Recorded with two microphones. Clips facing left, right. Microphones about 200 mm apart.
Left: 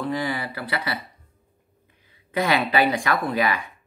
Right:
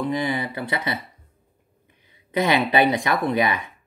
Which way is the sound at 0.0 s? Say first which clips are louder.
Right 2 dB; 20° right (ahead or behind).